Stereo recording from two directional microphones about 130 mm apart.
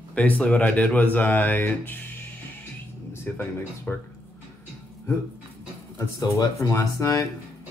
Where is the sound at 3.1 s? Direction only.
20° left (ahead or behind).